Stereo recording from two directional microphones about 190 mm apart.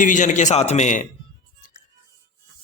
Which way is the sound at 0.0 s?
40° left (ahead or behind).